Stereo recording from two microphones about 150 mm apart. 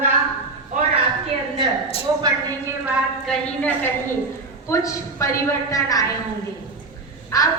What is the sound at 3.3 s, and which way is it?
A woman's voice, 10° left (ahead or behind).